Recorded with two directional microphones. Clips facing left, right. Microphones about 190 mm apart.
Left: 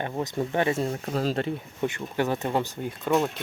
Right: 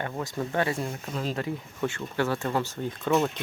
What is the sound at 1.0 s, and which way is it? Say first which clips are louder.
Speech: left 5 dB; 40° left (ahead or behind).